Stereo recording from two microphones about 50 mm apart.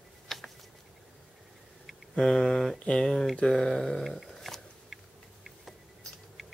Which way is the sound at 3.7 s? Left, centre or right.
Centre.